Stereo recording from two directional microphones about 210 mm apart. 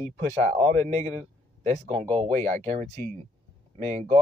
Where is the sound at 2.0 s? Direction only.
20° right (ahead or behind).